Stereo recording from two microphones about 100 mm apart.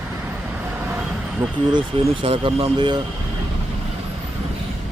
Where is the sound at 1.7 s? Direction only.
55° right (ahead or behind); by 2.7 s 75° right (ahead or behind).